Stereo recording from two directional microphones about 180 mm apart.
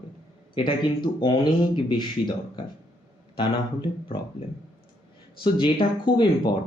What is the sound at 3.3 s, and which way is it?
Speech, 25° left (ahead or behind).